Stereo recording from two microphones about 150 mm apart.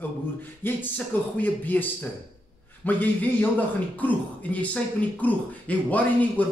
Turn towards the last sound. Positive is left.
turn(degrees=10)  # may be behind; listen again after turning